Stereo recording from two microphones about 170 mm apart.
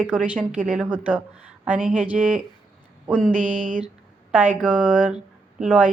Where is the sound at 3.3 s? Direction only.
50° right (ahead or behind).